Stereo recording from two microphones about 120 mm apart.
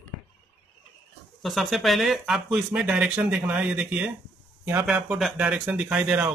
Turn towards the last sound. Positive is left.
turn(degrees=-10)  # may be behind; listen again after turning